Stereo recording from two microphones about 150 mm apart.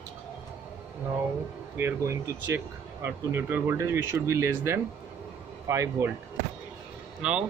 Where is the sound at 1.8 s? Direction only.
15° right (ahead or behind).